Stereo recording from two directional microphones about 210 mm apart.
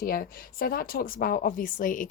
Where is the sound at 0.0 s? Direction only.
45° left (ahead or behind).